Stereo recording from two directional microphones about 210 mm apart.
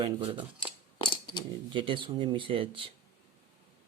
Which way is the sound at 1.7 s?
25° right (ahead or behind).